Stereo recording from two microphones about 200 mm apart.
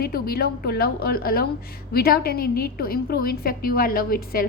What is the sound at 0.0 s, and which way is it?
A woman's voice, 50° left (ahead or behind).